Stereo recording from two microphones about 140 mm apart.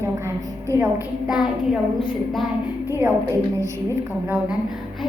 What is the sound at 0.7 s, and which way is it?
Speech, 20° right (ahead or behind).